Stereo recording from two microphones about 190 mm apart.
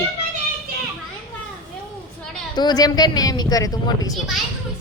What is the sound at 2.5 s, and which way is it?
Speech, 20° left (ahead or behind).